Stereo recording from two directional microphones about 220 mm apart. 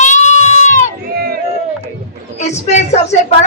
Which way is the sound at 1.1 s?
45° right (ahead or behind).